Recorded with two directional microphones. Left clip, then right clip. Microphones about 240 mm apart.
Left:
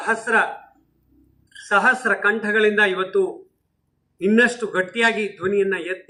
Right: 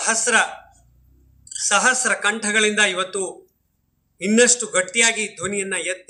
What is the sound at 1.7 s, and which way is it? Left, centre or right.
A man's voice, right.